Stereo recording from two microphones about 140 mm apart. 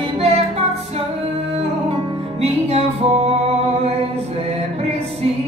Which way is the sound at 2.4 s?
45° right (ahead or behind).